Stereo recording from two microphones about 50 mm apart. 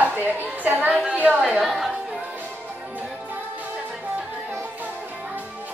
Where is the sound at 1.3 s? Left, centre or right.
Centre.